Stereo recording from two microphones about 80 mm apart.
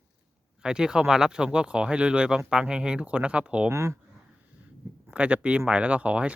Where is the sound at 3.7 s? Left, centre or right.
Right.